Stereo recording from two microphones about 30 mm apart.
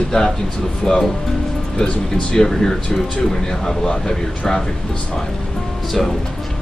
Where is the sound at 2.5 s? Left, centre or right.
Centre.